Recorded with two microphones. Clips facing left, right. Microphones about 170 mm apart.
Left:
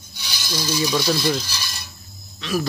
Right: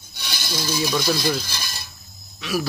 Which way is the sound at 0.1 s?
55° right (ahead or behind).